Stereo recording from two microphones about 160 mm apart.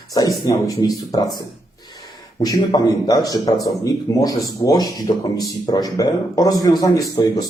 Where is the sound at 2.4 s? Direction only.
25° left (ahead or behind).